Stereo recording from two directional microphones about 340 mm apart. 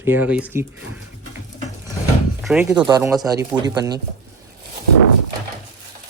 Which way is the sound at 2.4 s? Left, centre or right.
Centre.